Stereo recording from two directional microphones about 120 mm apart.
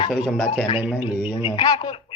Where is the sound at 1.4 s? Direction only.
40° left (ahead or behind).